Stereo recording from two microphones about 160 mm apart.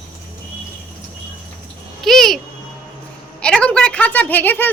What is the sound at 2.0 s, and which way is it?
Babbling, centre (ahead or behind).